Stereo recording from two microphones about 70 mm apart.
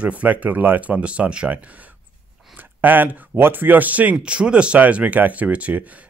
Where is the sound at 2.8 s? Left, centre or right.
Right.